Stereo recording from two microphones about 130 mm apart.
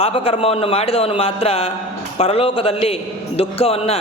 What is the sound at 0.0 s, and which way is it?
A woman's voice, 45° left (ahead or behind).